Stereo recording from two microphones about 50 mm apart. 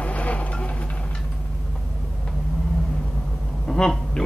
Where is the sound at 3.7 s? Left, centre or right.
Centre.